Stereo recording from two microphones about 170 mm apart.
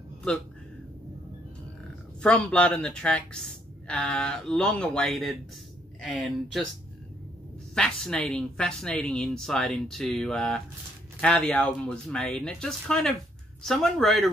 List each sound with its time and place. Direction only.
2.2 s speech: 5° left (ahead or behind)
7.7 s speech: 5° left (ahead or behind)